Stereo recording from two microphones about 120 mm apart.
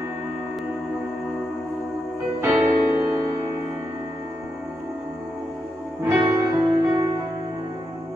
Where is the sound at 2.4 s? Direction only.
20° right (ahead or behind).